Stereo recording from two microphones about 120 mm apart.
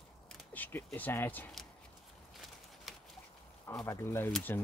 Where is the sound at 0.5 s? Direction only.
15° left (ahead or behind).